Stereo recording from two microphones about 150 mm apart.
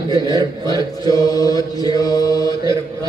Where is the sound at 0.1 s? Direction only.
30° right (ahead or behind).